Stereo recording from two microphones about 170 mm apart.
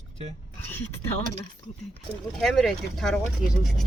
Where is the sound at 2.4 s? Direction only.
Centre (ahead or behind).